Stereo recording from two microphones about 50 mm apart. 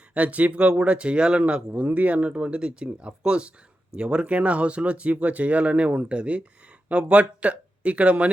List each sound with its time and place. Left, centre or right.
0.1 s speech: right